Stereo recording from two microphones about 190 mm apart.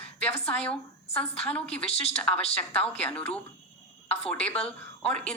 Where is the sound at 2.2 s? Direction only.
5° left (ahead or behind).